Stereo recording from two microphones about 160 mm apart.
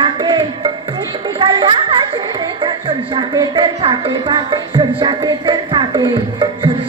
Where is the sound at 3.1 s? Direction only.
30° right (ahead or behind).